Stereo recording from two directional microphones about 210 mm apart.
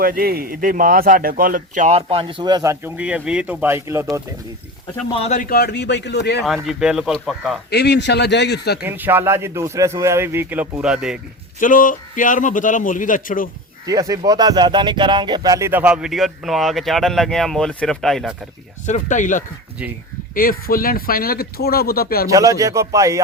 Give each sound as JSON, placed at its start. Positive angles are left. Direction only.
{"t": 0.0, "sound": "speech", "side_deg": -45}
{"t": 5.1, "sound": "speech", "side_deg": 30}
{"t": 6.4, "sound": "speech", "side_deg": 0}
{"t": 7.7, "sound": "speech", "side_deg": 50}
{"t": 8.8, "sound": "a man's voice", "side_deg": -10}
{"t": 11.6, "sound": "a man's voice", "side_deg": 40}
{"t": 13.8, "sound": "a man's voice", "side_deg": -15}
{"t": 18.9, "sound": "a man's voice", "side_deg": 35}
{"t": 22.3, "sound": "a man's voice", "side_deg": -15}